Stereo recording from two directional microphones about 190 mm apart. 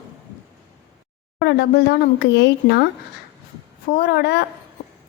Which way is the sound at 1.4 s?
60° left (ahead or behind).